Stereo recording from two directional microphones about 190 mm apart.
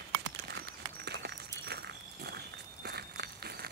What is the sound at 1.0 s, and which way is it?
Walk, 60° right (ahead or behind).